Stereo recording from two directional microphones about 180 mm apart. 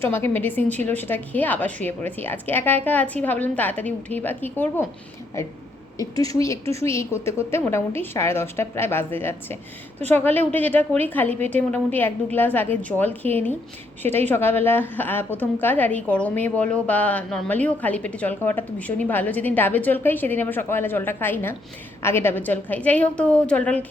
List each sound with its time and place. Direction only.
0.0 s a woman's voice: 15° left (ahead or behind)